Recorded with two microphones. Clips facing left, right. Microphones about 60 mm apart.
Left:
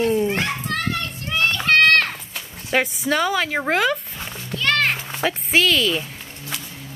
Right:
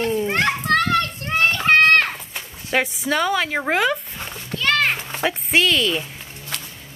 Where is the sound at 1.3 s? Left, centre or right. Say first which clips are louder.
Right 1 dB; right; by 2.4 s centre.